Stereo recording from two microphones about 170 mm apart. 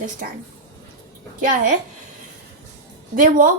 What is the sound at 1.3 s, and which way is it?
Speech, 50° right (ahead or behind).